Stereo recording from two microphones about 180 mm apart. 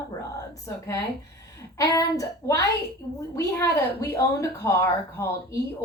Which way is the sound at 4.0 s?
15° left (ahead or behind).